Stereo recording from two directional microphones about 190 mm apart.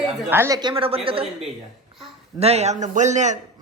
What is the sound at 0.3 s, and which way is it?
A man's voice, 15° right (ahead or behind).